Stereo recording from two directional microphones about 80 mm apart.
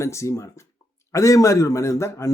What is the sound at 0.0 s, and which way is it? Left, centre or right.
A man's voice, left.